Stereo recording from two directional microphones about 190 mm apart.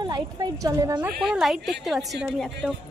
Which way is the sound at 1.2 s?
Centre (ahead or behind).